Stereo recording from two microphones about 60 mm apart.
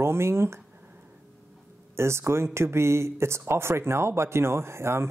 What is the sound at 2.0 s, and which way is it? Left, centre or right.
Speech, right.